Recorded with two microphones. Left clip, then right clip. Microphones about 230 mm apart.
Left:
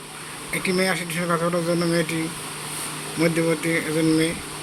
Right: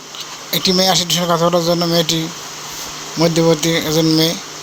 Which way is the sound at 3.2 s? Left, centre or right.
Right.